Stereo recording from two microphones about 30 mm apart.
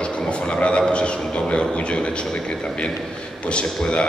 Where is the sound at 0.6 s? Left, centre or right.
Left.